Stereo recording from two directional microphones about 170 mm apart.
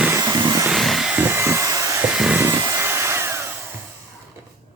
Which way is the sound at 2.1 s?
5° right (ahead or behind).